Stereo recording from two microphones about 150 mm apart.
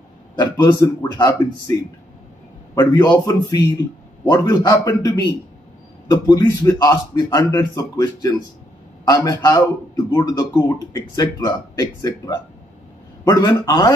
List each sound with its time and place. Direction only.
0.4 s a man's voice: 25° left (ahead or behind)